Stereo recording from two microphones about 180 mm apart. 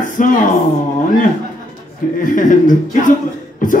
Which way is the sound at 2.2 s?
45° left (ahead or behind).